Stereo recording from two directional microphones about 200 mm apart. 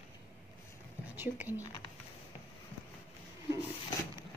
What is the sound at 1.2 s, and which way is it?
Speech, 10° right (ahead or behind).